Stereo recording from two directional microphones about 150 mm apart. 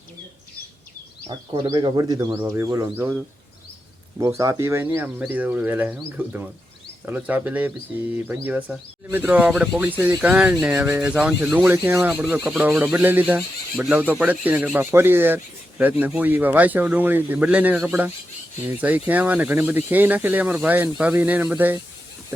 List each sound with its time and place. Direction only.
1.3 s speech: 30° right (ahead or behind)
4.2 s speech: 20° right (ahead or behind)